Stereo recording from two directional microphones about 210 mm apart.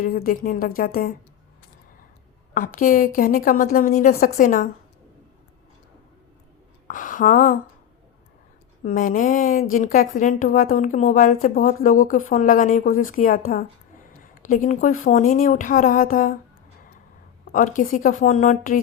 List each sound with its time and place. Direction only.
0.0 s a woman's voice: 45° left (ahead or behind)
2.6 s a woman's voice: 45° left (ahead or behind)
6.8 s speech: 40° left (ahead or behind)
8.8 s a woman's voice: 40° left (ahead or behind)
14.4 s a woman's voice: 40° left (ahead or behind)
17.5 s a woman's voice: 40° left (ahead or behind)